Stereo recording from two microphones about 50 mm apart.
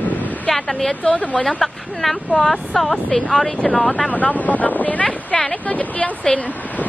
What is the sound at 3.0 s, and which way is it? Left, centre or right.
Speech, centre.